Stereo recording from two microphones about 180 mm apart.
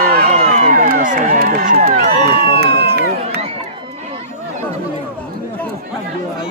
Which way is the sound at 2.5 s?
60° right (ahead or behind).